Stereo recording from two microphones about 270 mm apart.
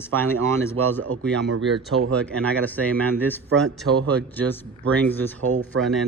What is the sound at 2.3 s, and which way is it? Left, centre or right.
Speech, centre.